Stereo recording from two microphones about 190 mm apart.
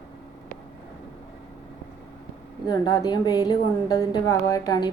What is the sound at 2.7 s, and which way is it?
A woman's voice, 20° left (ahead or behind).